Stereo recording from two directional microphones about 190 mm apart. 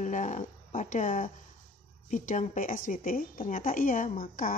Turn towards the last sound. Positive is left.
turn(degrees=45)  # may be behind; listen again after turning